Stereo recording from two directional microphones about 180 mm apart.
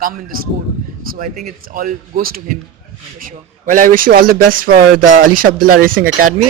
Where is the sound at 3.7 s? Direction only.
50° right (ahead or behind).